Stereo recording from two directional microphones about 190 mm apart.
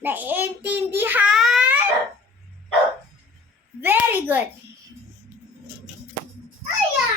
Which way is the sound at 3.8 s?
10° right (ahead or behind).